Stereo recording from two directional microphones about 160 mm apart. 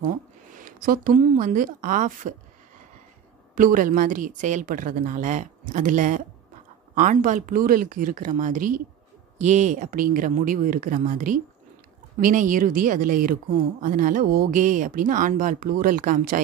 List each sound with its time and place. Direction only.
0.6 s speech: 60° right (ahead or behind)
3.5 s a woman's voice: 60° right (ahead or behind)